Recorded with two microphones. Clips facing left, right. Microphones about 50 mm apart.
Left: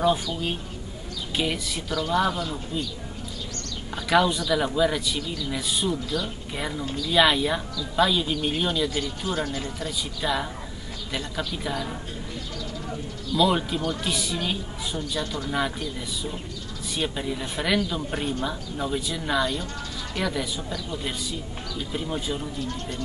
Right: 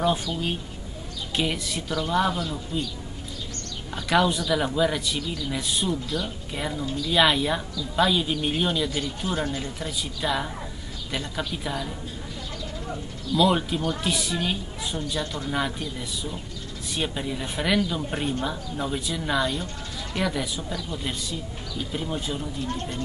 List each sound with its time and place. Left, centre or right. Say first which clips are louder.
0.0 s speech: left 1 dB; centre
3.9 s a woman's voice: left 1 dB; centre
13.3 s speech: right 1 dB; centre
16.9 s speech: left 1 dB; centre
22.6 s speech: right 1 dB; right